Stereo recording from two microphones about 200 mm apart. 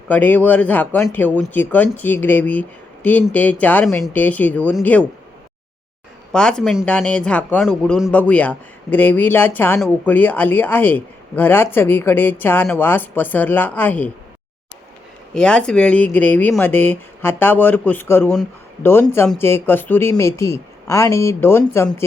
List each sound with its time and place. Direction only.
0.1 s speech: 10° left (ahead or behind)
6.3 s speech: 5° left (ahead or behind)
15.3 s speech: 5° left (ahead or behind)